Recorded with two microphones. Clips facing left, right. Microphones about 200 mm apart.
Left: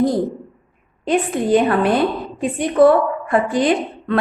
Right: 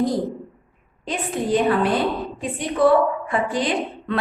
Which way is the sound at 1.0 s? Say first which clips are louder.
Left 7 dB; 60° left (ahead or behind).